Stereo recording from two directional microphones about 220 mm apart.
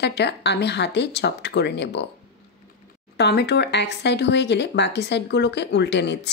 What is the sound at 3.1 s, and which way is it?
Speech, 50° left (ahead or behind).